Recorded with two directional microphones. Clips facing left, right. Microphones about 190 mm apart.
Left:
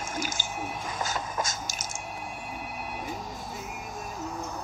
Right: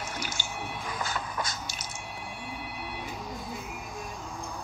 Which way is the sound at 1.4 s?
45° left (ahead or behind).